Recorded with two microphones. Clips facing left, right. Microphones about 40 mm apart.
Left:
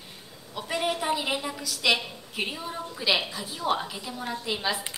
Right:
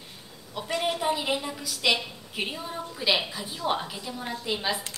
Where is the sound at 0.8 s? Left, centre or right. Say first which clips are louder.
Even; centre.